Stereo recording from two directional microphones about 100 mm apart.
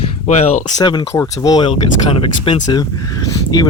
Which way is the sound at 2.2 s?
55° left (ahead or behind).